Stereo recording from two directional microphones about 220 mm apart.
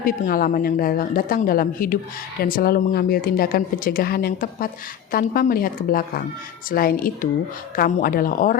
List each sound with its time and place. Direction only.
0.0 s a woman's voice: 40° left (ahead or behind)